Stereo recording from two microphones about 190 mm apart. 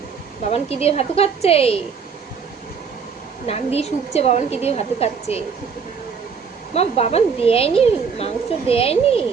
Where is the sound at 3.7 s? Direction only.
35° left (ahead or behind).